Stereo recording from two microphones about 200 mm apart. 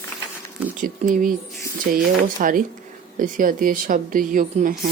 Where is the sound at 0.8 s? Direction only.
40° right (ahead or behind).